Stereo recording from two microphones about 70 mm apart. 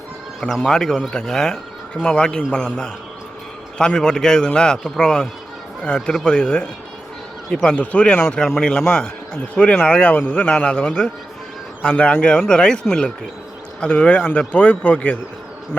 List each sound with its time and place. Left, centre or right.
0.4 s a man's voice: centre
13.8 s a man's voice: centre